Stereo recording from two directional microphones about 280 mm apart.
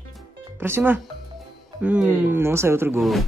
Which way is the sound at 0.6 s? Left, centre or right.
Centre.